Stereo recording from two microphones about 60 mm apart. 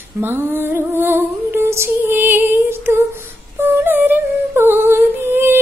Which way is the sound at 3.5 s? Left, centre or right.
Right.